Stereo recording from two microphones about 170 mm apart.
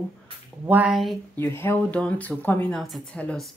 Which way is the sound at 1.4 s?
15° left (ahead or behind).